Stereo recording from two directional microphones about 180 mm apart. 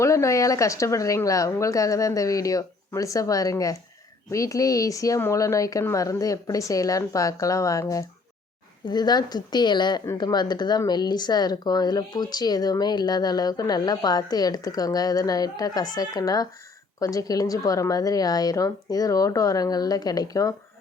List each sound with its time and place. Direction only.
0.0 s a woman's voice: 15° left (ahead or behind)